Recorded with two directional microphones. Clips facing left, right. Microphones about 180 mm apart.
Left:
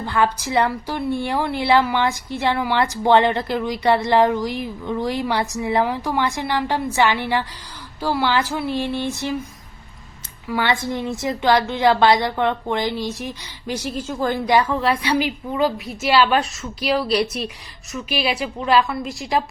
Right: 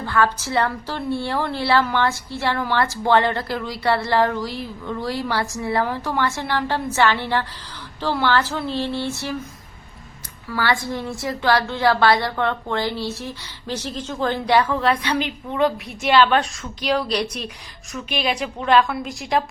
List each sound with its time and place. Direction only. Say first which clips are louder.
0.0 s a woman's voice: even; 20° left (ahead or behind)
10.5 s a woman's voice: left 1 dB; 20° left (ahead or behind); by 19.4 s centre (ahead or behind)